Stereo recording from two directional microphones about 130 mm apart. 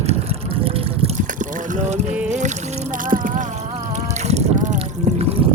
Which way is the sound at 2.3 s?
65° right (ahead or behind).